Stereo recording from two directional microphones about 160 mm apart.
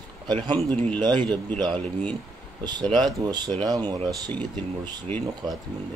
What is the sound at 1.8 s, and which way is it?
Speech, 10° left (ahead or behind).